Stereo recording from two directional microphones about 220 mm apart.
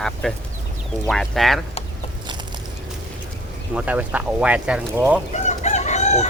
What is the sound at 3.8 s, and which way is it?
Speech, 5° right (ahead or behind).